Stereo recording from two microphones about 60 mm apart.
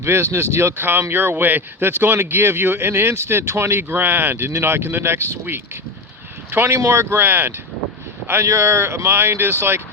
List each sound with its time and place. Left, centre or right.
0.0 s speech: right
8.4 s speech: right